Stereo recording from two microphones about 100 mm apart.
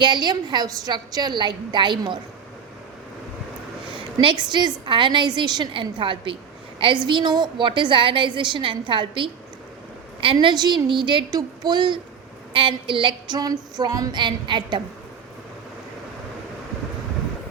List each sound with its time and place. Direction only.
0.0 s a woman's voice: 50° right (ahead or behind)
3.9 s a sound: 60° right (ahead or behind)
4.9 s a woman's voice: 55° right (ahead or behind)
10.5 s a woman's voice: 45° right (ahead or behind)
12.5 s a sound: 60° right (ahead or behind)
13.4 s a woman's voice: 40° right (ahead or behind)